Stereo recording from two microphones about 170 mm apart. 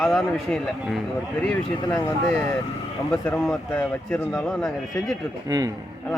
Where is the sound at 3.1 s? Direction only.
10° left (ahead or behind).